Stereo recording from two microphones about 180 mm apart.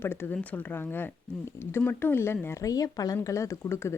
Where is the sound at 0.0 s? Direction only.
10° left (ahead or behind).